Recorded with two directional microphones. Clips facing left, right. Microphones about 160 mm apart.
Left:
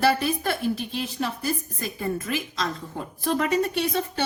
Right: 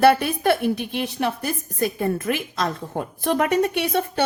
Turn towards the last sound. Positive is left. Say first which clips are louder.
# right 4 dB
turn(degrees=-65)  # may be behind; listen again after turning